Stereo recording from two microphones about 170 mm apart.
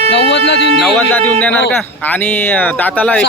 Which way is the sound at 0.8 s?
10° left (ahead or behind).